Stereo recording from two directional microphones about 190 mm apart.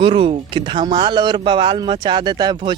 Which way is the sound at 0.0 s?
25° right (ahead or behind).